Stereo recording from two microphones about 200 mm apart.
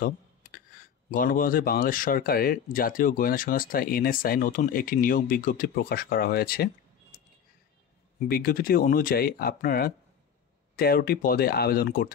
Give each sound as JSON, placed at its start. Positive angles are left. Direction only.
{"t": 1.1, "sound": "speech", "side_deg": 45}
{"t": 8.3, "sound": "speech", "side_deg": 45}